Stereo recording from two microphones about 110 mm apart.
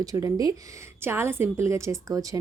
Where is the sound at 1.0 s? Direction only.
20° right (ahead or behind).